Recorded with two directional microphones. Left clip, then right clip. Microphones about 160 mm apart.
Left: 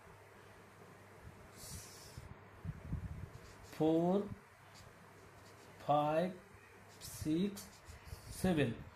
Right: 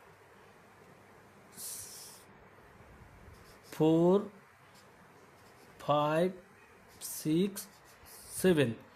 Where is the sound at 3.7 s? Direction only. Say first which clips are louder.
Right 7 dB; 65° right (ahead or behind).